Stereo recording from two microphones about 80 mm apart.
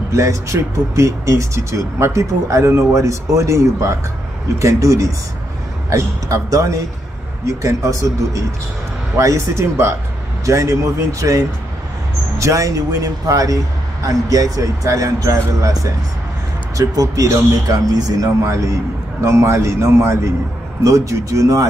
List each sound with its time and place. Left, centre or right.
0.1 s speech: right
19.2 s speech: right